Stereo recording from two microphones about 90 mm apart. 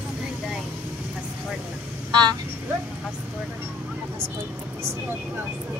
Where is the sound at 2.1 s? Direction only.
55° right (ahead or behind).